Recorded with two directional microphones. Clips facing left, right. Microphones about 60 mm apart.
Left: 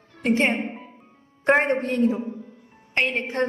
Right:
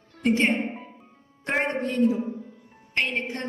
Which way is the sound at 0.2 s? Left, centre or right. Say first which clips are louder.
Left 1 dB; left.